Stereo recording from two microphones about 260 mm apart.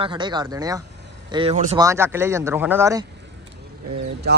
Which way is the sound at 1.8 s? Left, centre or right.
Centre.